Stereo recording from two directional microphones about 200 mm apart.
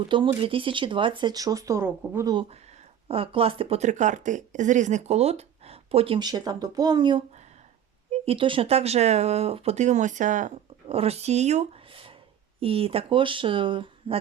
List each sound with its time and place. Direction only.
0.1 s speech: 25° right (ahead or behind)